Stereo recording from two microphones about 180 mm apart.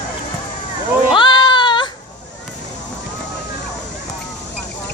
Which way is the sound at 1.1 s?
25° left (ahead or behind).